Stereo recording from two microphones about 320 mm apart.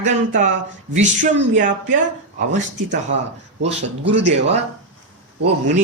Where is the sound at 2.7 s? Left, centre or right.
Right.